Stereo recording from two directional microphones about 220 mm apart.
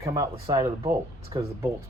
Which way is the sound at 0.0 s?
15° right (ahead or behind).